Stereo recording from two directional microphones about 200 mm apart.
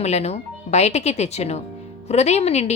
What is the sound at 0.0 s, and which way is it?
Speech, 30° left (ahead or behind).